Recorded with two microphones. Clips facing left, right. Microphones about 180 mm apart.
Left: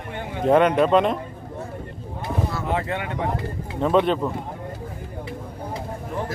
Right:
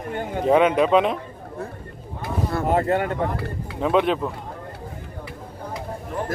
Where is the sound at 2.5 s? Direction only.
50° right (ahead or behind).